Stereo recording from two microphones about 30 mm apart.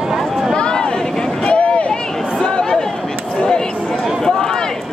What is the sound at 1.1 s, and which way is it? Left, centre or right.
Vehicle, left.